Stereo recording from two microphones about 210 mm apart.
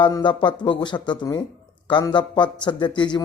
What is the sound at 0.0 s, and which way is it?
Speech, 20° left (ahead or behind).